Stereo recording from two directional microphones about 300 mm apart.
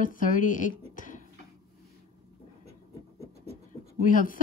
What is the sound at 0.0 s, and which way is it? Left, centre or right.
A woman's voice, left.